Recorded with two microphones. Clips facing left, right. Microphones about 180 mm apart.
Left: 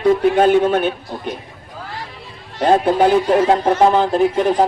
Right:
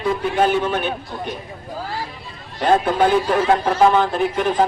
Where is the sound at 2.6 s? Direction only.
35° left (ahead or behind).